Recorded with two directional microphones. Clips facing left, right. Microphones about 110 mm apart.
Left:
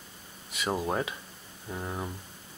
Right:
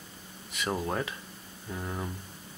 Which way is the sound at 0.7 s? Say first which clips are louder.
Left 2 dB; 10° left (ahead or behind).